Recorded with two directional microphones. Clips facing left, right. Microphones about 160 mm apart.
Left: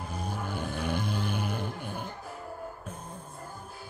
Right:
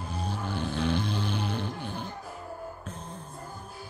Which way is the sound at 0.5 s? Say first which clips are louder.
Right 5 dB; 10° left (ahead or behind).